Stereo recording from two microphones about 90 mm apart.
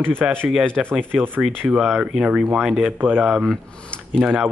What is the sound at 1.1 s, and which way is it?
Speech, 20° right (ahead or behind).